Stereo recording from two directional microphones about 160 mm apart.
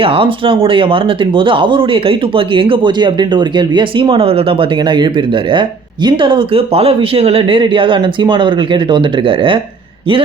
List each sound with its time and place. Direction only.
0.0 s speech: 35° right (ahead or behind)